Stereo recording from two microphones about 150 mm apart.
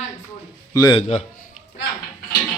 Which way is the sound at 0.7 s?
25° left (ahead or behind).